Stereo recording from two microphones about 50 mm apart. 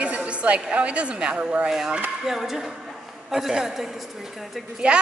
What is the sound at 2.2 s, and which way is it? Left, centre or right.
A woman's voice, centre.